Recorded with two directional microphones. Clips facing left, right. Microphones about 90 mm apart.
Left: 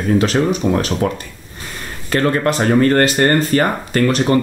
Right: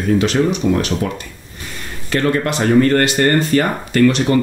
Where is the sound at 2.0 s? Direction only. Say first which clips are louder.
Left 1 dB; 40° left (ahead or behind).